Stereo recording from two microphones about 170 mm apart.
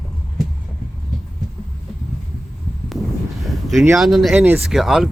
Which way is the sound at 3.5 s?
Centre (ahead or behind).